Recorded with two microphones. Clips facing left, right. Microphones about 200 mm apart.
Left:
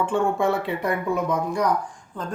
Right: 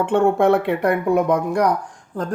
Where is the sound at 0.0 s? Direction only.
65° right (ahead or behind).